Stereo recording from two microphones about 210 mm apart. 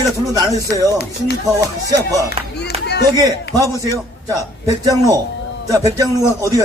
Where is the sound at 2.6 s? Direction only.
50° left (ahead or behind).